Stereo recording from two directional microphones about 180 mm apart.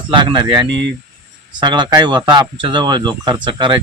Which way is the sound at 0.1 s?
25° right (ahead or behind).